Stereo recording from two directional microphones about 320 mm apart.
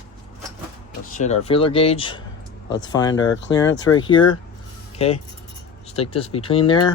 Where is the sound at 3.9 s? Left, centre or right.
Centre.